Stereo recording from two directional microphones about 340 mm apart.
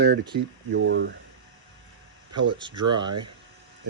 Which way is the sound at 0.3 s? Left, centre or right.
Right.